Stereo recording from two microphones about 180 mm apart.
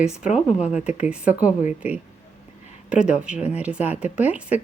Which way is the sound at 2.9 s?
5° right (ahead or behind).